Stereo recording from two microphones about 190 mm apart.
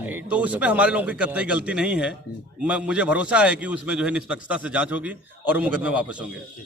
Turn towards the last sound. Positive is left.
turn(degrees=-5)  # may be behind; listen again after turning